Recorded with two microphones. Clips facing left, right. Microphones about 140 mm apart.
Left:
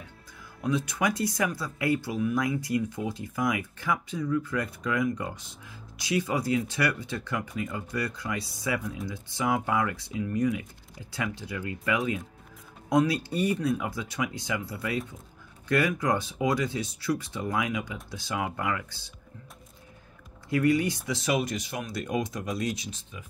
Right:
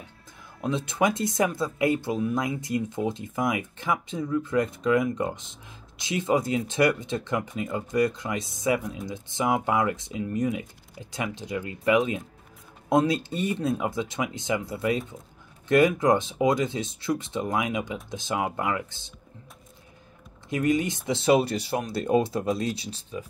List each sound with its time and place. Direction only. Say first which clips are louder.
0.6 s speech: right 3 dB; 25° right (ahead or behind)
20.4 s speech: even; 20° right (ahead or behind)